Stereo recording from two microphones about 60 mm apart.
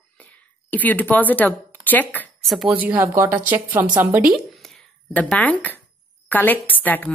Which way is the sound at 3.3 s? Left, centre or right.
Right.